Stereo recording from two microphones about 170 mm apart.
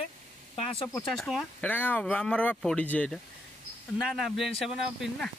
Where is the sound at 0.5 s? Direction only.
35° left (ahead or behind).